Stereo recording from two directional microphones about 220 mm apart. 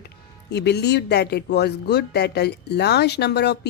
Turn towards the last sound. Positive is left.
turn(degrees=50)  # may be behind; listen again after turning